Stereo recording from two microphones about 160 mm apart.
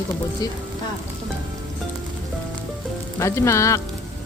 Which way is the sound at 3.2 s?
20° left (ahead or behind).